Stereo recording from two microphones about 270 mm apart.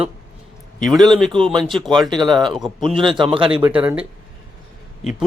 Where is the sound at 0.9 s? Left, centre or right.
Centre.